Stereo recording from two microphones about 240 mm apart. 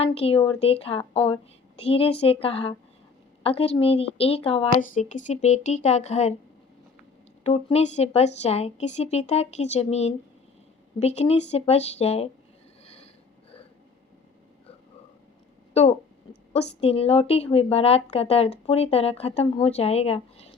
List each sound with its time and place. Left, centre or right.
0.0 s a woman's voice: left
7.4 s a woman's voice: left
12.8 s a sound: left
15.7 s a woman's voice: left